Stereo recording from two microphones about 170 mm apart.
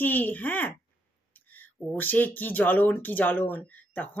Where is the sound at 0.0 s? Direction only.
10° left (ahead or behind).